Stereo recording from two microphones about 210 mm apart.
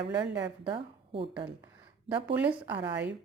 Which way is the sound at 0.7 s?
25° right (ahead or behind).